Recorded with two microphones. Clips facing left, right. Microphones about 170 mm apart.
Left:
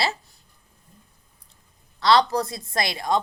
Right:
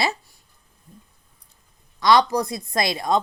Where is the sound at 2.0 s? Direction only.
15° right (ahead or behind).